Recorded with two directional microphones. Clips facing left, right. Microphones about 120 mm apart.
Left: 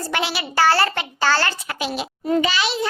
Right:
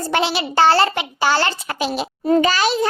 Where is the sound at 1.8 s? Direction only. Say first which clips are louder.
Right 4 dB; 35° right (ahead or behind).